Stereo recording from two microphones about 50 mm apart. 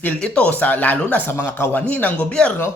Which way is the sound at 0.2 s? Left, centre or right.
Left.